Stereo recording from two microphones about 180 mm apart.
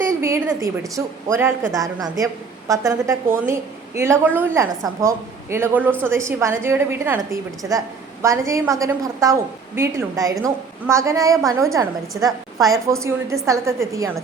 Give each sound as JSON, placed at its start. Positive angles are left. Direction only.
{"t": 0.0, "sound": "a woman's voice", "side_deg": -15}